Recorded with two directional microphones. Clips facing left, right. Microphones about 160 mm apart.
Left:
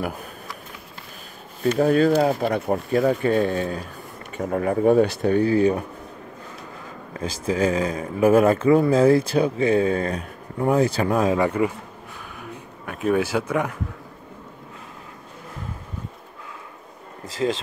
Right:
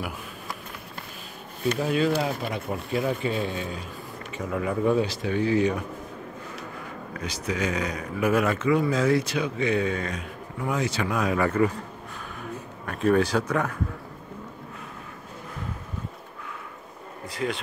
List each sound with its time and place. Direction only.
0.0 s speech: 40° left (ahead or behind)
1.8 s speech: 45° left (ahead or behind)
7.2 s speech: 30° left (ahead or behind)
11.3 s speech: 15° left (ahead or behind)
12.8 s speech: 10° left (ahead or behind)
17.4 s speech: 25° left (ahead or behind)